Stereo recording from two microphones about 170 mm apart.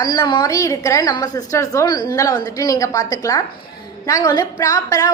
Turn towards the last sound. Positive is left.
turn(degrees=20)  # may be behind; listen again after turning